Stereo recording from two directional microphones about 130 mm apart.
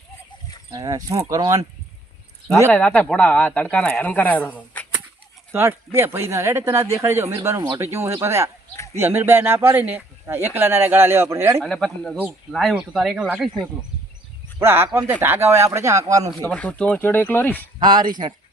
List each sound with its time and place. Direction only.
0.7 s speech: 30° right (ahead or behind)
2.7 s speech: 10° left (ahead or behind)
5.5 s speech: 20° right (ahead or behind)
8.7 s speech: 25° left (ahead or behind)
9.0 s speech: 20° right (ahead or behind)
11.6 s speech: 5° left (ahead or behind)
14.6 s speech: 15° right (ahead or behind)
16.4 s speech: 10° left (ahead or behind)
17.7 s speech: 35° right (ahead or behind)